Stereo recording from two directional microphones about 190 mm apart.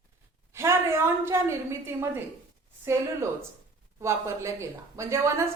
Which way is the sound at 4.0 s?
15° right (ahead or behind).